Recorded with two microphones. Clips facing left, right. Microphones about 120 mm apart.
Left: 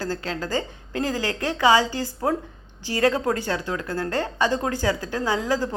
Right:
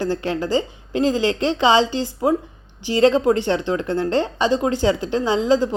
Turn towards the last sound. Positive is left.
turn(degrees=-20)  # may be behind; listen again after turning